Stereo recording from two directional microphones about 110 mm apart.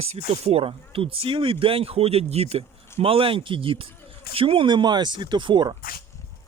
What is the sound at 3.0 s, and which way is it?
Speech, 55° right (ahead or behind).